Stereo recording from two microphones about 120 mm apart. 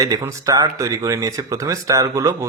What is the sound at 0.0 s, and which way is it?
Speech, 30° right (ahead or behind).